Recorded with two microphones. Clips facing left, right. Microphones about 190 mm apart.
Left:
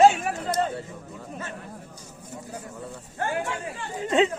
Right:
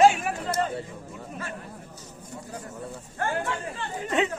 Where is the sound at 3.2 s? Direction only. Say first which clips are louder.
Even; 15° left (ahead or behind).